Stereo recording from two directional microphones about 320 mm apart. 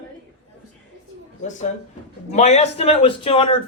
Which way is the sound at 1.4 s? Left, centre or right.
Left.